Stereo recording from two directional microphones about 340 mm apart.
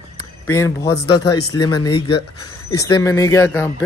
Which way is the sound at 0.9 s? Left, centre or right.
Left.